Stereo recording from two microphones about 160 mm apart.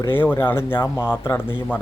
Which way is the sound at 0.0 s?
15° left (ahead or behind).